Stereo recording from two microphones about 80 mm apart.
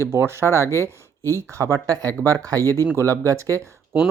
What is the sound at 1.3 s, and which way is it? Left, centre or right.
Speech, right.